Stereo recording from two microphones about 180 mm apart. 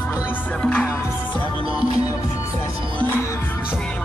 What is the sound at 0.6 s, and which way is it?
Music, 5° left (ahead or behind).